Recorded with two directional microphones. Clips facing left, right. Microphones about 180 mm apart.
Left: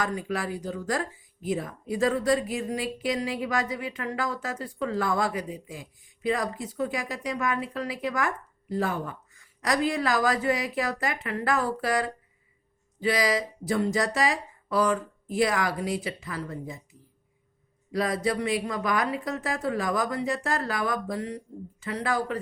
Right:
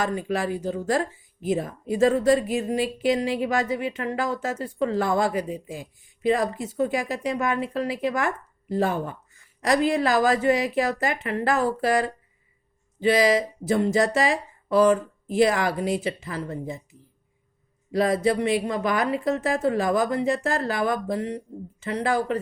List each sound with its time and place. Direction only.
0.0 s speech: 25° right (ahead or behind)
17.9 s speech: 25° right (ahead or behind)